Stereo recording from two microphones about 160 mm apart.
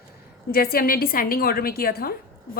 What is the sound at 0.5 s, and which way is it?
A woman's voice, 70° left (ahead or behind).